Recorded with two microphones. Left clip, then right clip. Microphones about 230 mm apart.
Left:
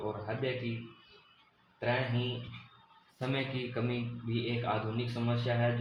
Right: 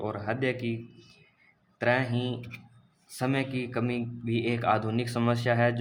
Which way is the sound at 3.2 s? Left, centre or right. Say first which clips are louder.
Right 5 dB; centre.